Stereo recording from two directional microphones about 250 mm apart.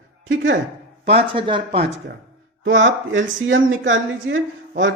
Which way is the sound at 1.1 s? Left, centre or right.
Right.